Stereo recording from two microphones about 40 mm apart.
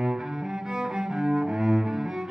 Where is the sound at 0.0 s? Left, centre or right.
Centre.